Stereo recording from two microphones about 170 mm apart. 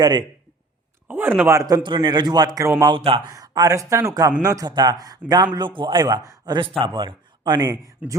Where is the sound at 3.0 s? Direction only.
35° right (ahead or behind).